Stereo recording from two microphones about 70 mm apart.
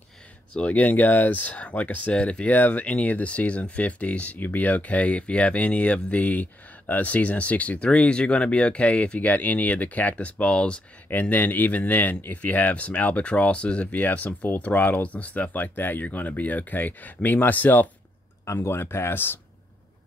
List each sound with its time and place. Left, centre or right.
0.6 s speech: left
11.1 s speech: left
18.4 s speech: left